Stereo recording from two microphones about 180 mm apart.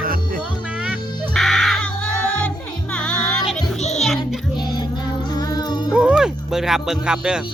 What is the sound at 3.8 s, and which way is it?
Music, 40° left (ahead or behind).